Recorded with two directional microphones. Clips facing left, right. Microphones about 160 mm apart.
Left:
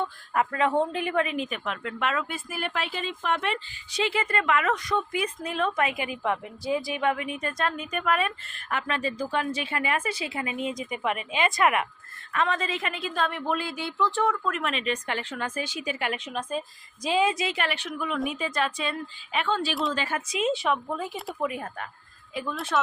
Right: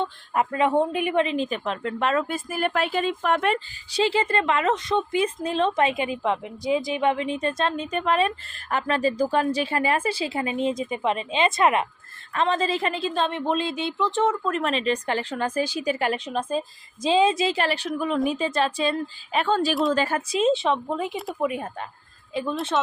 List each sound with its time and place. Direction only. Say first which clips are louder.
0.0 s a woman's voice: right 2 dB; 20° right (ahead or behind); by 3.6 s 45° right (ahead or behind)
3.9 s a woman's voice: right 5 dB; 30° right (ahead or behind)